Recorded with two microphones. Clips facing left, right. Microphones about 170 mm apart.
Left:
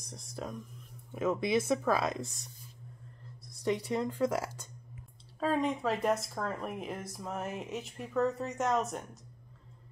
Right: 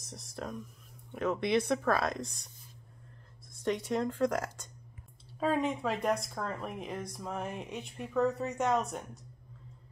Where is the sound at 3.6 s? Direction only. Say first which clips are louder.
Even; 5° left (ahead or behind).